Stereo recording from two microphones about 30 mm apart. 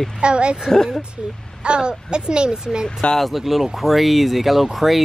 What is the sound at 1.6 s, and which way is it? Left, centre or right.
A child's voice, right.